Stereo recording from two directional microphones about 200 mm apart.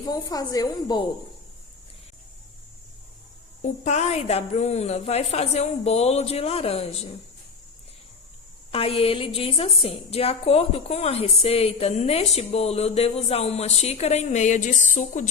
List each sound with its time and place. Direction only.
0.1 s a woman's voice: 20° left (ahead or behind)
3.6 s a woman's voice: 35° left (ahead or behind)
8.7 s a woman's voice: 30° left (ahead or behind)